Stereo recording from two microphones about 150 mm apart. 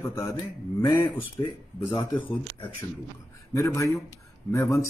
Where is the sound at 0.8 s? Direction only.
30° left (ahead or behind).